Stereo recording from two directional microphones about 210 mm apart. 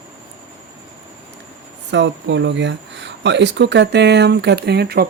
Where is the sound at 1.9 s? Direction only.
55° right (ahead or behind).